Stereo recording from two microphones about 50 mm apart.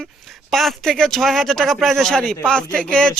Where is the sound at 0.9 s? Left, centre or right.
Centre.